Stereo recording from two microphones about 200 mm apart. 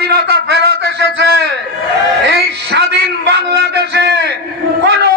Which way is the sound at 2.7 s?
60° right (ahead or behind).